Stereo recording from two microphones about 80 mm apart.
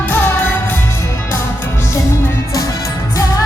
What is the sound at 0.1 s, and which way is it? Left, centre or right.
Music, left.